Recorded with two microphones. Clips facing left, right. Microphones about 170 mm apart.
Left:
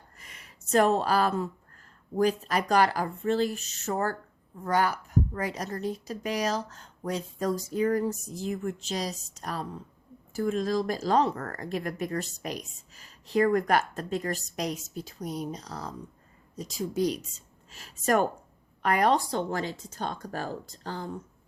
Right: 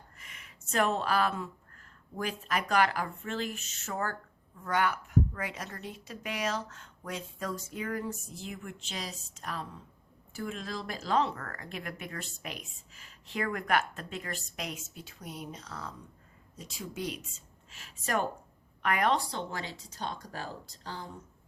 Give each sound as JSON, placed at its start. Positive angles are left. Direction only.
{"t": 0.2, "sound": "a woman's voice", "side_deg": 35}